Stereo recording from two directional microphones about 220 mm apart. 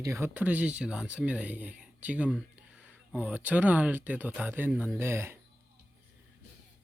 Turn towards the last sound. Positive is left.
turn(degrees=-10)  # may be behind; listen again after turning